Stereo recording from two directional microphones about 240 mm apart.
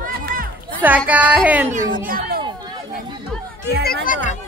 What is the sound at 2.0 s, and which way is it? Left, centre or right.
Speech, right.